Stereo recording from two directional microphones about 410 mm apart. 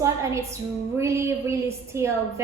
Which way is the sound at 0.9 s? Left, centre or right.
Centre.